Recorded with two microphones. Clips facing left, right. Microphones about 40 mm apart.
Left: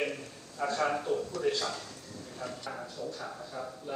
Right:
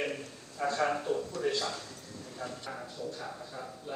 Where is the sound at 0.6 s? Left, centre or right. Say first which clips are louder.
Even; right.